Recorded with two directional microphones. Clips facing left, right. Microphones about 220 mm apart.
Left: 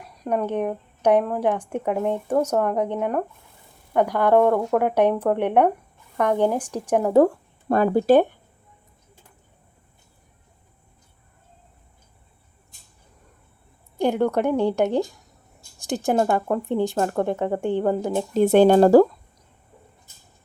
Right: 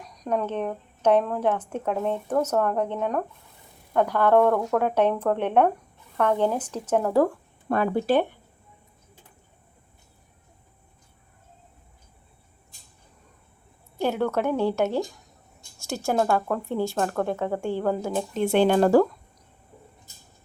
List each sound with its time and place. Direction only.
0.0 s a woman's voice: 5° left (ahead or behind)
7.7 s speech: 35° left (ahead or behind)
14.0 s speech: 15° left (ahead or behind)
18.3 s speech: 40° left (ahead or behind)